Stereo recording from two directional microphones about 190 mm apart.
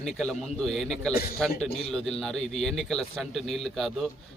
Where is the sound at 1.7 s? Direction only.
30° left (ahead or behind).